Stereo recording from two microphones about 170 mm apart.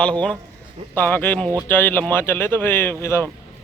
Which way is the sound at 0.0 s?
5° left (ahead or behind).